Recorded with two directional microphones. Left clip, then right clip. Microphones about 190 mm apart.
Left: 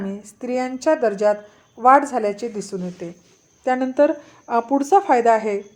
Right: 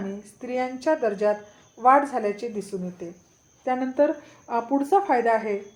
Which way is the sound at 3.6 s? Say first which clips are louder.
Left 5 dB; 35° left (ahead or behind).